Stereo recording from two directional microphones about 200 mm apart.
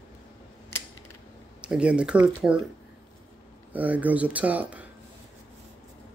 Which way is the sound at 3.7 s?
10° right (ahead or behind).